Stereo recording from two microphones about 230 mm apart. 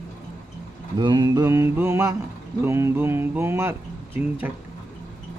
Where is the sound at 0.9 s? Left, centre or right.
Centre.